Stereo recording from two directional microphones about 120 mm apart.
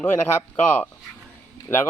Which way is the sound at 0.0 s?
15° left (ahead or behind).